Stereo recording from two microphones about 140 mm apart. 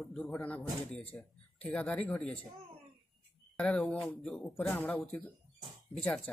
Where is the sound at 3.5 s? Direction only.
10° left (ahead or behind).